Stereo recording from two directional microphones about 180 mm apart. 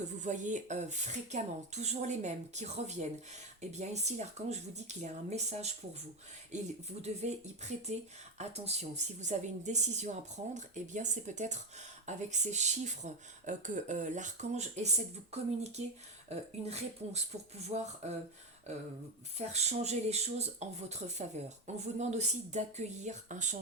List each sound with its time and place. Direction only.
0.0 s speech: 40° right (ahead or behind)
7.0 s speech: 40° right (ahead or behind)
19.4 s speech: 35° right (ahead or behind)